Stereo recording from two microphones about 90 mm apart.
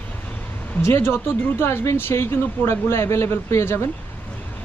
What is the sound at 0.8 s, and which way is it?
Speech, 25° left (ahead or behind).